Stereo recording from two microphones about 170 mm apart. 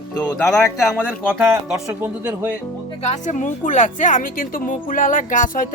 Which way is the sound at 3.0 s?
45° left (ahead or behind).